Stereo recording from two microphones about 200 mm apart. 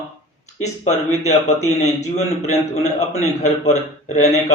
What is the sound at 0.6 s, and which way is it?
A man's voice, 35° left (ahead or behind).